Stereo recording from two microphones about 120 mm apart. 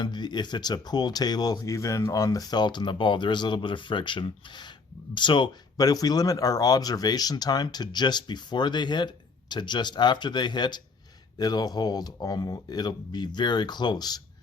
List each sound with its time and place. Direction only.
0.0 s speech: 40° left (ahead or behind)